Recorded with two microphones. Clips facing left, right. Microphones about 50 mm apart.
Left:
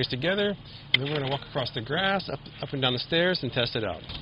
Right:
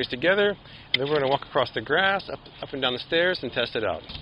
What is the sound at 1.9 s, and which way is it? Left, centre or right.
Speech, centre.